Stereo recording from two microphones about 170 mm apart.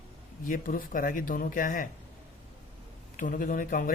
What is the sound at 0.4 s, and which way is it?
Speech, 55° left (ahead or behind).